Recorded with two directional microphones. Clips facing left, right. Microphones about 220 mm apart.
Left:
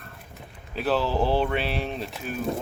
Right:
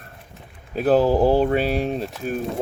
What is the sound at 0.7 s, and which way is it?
Speech, 45° right (ahead or behind).